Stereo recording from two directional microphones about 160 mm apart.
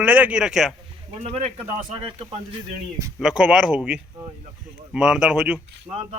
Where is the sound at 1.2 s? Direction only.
40° right (ahead or behind).